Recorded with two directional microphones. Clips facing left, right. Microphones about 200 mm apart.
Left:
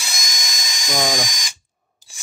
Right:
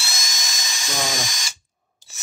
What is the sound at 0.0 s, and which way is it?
Dental drill, 15° left (ahead or behind).